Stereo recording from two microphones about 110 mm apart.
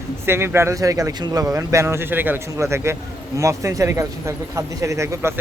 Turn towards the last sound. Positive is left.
turn(degrees=-25)  # may be behind; listen again after turning